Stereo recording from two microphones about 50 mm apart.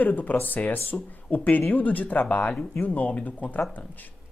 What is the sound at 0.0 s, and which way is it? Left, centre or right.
Speech, left.